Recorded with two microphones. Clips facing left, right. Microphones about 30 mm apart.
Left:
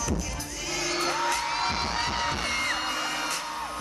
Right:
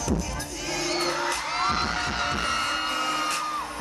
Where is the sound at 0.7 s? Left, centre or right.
Right.